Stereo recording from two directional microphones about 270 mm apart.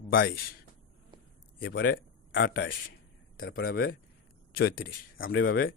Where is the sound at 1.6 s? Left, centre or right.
Left.